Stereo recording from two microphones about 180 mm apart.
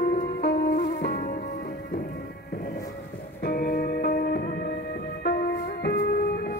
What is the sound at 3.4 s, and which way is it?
Music, 55° left (ahead or behind).